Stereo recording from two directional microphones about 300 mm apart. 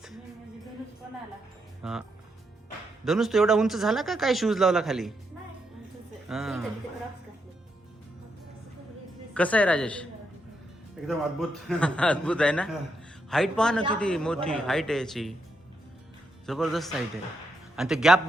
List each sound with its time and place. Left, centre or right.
1.8 s speech: centre
6.2 s speech: centre
9.3 s speech: centre
16.5 s speech: centre